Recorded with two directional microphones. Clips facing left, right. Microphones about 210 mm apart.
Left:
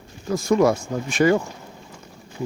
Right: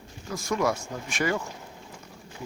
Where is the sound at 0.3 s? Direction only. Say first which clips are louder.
Left 9 dB; 30° left (ahead or behind).